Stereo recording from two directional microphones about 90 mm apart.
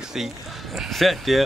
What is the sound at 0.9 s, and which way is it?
Speech, centre (ahead or behind).